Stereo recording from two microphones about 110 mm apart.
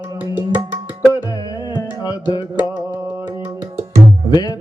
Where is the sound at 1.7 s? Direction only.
35° left (ahead or behind).